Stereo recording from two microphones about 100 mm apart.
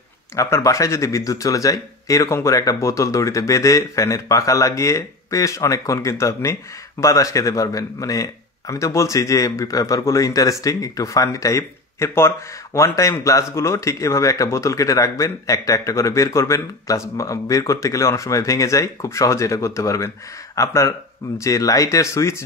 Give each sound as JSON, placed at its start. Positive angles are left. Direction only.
{"t": 0.4, "sound": "a man's voice", "side_deg": 30}